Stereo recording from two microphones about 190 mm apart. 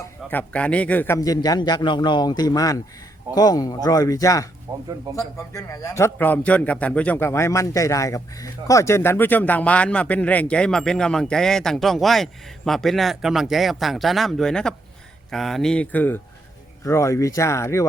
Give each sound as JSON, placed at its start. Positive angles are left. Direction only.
{"t": 0.3, "sound": "a man's voice", "side_deg": 10}
{"t": 4.7, "sound": "speech", "side_deg": -20}
{"t": 5.1, "sound": "a man's voice", "side_deg": 15}